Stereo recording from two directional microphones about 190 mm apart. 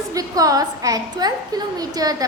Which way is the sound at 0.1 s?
20° right (ahead or behind).